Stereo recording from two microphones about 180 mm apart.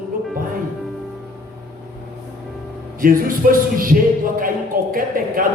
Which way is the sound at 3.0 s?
50° right (ahead or behind).